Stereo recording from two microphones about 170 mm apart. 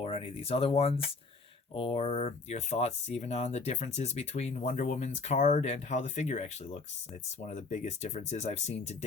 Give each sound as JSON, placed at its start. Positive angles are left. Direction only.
{"t": 0.0, "sound": "speech", "side_deg": 35}